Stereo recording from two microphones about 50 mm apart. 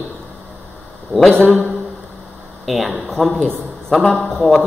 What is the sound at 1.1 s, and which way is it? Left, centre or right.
Speech, centre.